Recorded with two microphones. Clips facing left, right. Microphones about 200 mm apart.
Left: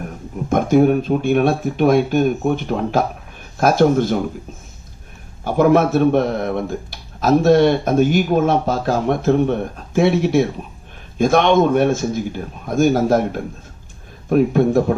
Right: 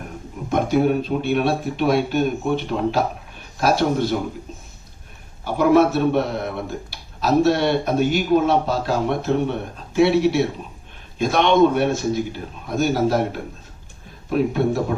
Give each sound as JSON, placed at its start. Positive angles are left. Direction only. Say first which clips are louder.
{"t": 0.5, "sound": "speech", "louder": "left 4 dB", "side_deg": 50}
{"t": 5.5, "sound": "speech", "louder": "left 2 dB", "side_deg": 50}